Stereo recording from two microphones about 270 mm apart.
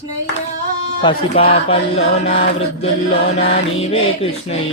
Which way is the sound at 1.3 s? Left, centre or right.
Left.